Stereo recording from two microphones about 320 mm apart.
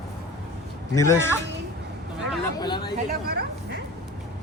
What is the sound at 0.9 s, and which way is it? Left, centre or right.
Speech, centre.